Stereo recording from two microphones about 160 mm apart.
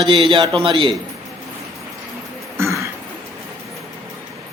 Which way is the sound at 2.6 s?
20° right (ahead or behind).